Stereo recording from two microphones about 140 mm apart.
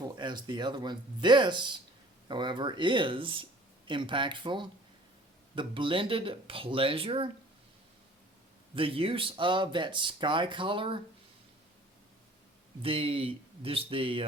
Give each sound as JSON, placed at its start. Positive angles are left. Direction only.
{"t": 0.0, "sound": "speech", "side_deg": -30}
{"t": 8.7, "sound": "speech", "side_deg": -40}
{"t": 12.8, "sound": "speech", "side_deg": -40}